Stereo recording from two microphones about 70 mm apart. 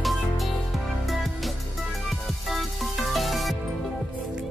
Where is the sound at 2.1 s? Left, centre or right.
Centre.